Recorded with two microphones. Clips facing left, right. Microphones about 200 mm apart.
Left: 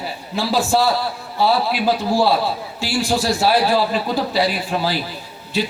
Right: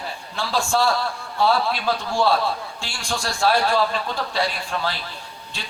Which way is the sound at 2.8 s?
5° left (ahead or behind).